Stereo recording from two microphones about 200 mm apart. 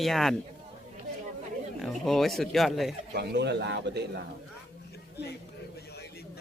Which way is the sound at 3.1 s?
55° right (ahead or behind).